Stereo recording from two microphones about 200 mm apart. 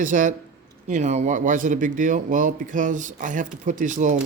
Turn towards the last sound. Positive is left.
turn(degrees=-40)  # may be behind; listen again after turning